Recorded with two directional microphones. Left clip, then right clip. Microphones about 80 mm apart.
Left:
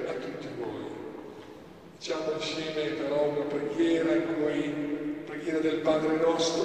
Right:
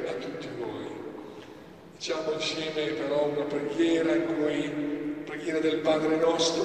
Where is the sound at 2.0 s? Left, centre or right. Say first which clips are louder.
Right 2 dB; right.